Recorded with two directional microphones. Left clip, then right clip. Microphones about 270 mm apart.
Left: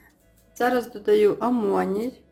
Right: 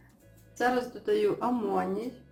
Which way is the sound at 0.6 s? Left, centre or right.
Left.